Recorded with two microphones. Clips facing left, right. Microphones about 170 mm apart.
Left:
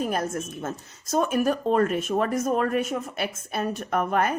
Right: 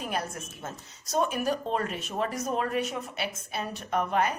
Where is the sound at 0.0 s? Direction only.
45° left (ahead or behind).